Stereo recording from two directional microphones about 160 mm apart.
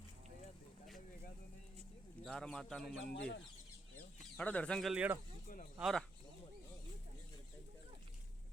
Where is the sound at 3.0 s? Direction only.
90° left.